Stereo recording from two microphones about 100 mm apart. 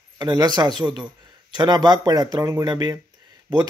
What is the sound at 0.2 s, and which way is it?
Speech, 45° right (ahead or behind).